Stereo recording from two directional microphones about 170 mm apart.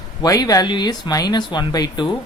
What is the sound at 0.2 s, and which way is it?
Speech, 20° left (ahead or behind).